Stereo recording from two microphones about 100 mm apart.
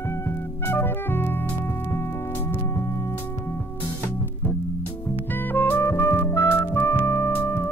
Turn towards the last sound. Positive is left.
turn(degrees=20)  # may be behind; listen again after turning